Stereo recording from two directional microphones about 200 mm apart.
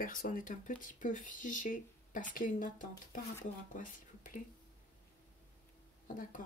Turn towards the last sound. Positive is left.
turn(degrees=40)  # may be behind; listen again after turning